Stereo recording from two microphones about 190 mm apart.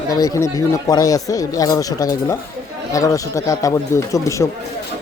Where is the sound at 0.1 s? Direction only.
20° left (ahead or behind).